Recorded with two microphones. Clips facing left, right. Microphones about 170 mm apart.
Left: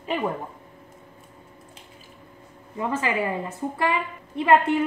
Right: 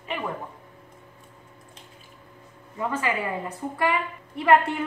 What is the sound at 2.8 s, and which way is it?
A woman's voice, 25° left (ahead or behind).